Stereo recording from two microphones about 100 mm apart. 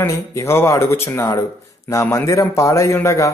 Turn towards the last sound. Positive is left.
turn(degrees=30)  # may be behind; listen again after turning